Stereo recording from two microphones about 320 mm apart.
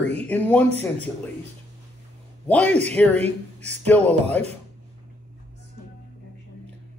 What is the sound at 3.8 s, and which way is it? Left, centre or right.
Speech, centre.